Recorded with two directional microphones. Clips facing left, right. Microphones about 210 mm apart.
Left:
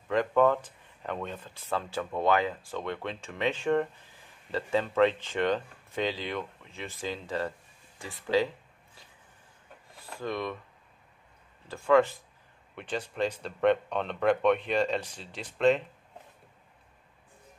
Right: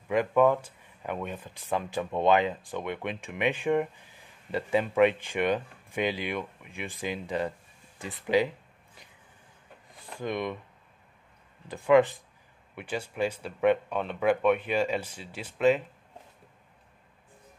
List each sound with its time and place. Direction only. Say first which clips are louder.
0.1 s speech: right 1 dB; 10° right (ahead or behind)
8.0 s a sound: right 2 dB; 15° right (ahead or behind)
11.6 s speech: right 2 dB; 15° right (ahead or behind)